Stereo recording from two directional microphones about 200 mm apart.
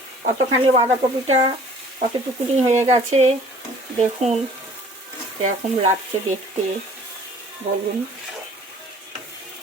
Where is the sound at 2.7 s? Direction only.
35° right (ahead or behind).